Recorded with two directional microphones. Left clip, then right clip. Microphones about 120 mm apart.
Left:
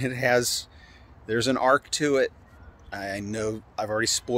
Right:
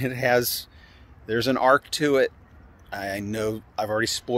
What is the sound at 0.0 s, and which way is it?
Speech, 10° right (ahead or behind).